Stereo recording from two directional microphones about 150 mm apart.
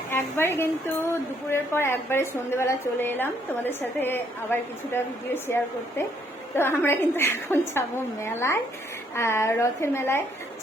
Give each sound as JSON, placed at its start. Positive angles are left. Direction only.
{"t": 0.1, "sound": "speech", "side_deg": 15}
{"t": 6.6, "sound": "speech", "side_deg": 15}